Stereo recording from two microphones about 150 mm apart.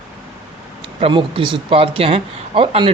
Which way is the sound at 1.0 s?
35° right (ahead or behind).